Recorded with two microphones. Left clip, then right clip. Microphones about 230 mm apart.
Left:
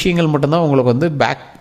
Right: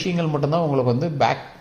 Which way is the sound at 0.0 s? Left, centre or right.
Left.